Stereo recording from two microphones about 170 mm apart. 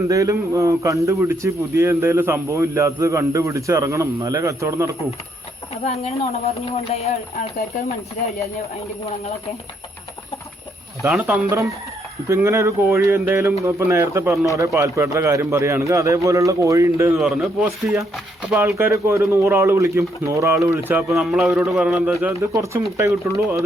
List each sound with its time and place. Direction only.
0.1 s a man's voice: 20° right (ahead or behind)
5.8 s speech: 35° left (ahead or behind)
11.2 s a man's voice: 15° right (ahead or behind)
17.2 s speech: centre (ahead or behind)
18.8 s a man's voice: 15° right (ahead or behind)
21.2 s a man's voice: centre (ahead or behind); by 23.6 s 15° right (ahead or behind)